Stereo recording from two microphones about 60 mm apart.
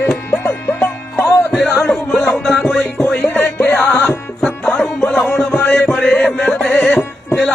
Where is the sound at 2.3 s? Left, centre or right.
Centre.